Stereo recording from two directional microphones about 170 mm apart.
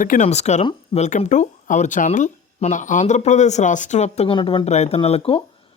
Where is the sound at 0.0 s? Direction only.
45° left (ahead or behind).